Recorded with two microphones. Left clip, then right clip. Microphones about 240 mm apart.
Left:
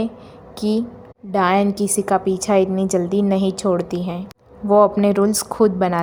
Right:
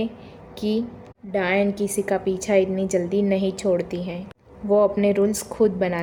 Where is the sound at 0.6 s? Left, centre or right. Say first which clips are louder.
Left 3 dB; left.